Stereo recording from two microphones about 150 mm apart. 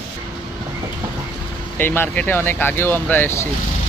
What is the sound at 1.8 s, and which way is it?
Speech, 10° left (ahead or behind).